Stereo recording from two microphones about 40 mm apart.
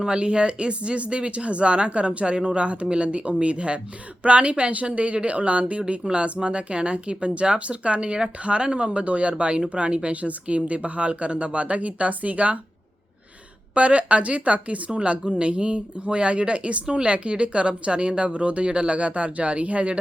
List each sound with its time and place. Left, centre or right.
0.0 s speech: right
13.7 s speech: right